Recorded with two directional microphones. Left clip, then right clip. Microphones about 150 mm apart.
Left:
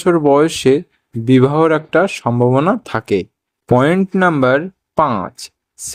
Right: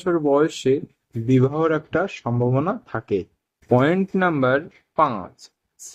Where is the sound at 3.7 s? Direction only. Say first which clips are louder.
Left 6 dB; 20° left (ahead or behind).